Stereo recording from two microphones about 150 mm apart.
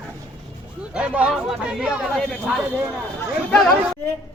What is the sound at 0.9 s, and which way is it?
Speech, 5° right (ahead or behind).